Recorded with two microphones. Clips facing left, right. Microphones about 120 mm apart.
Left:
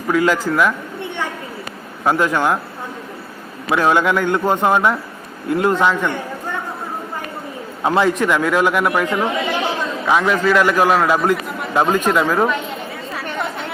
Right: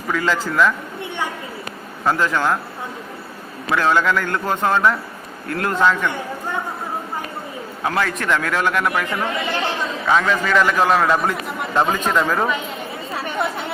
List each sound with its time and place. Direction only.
0.1 s a man's voice: 10° left (ahead or behind)
2.0 s a man's voice: 10° left (ahead or behind)
3.7 s a man's voice: 15° left (ahead or behind)
7.9 s a man's voice: 20° left (ahead or behind)